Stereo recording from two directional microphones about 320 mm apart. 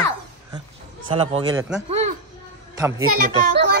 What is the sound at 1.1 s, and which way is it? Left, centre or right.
Speech, centre.